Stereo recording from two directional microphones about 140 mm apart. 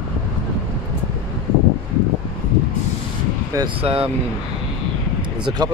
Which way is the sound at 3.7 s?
40° right (ahead or behind).